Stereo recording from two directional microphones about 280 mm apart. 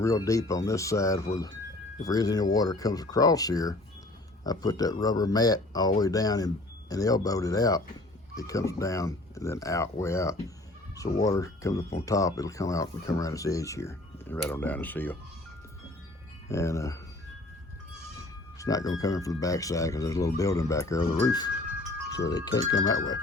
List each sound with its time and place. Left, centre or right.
0.0 s speech: centre
16.5 s speech: centre
18.6 s speech: centre